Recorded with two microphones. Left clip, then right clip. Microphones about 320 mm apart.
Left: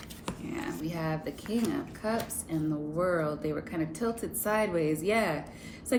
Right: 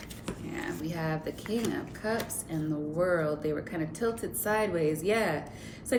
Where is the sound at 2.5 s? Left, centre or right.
Centre.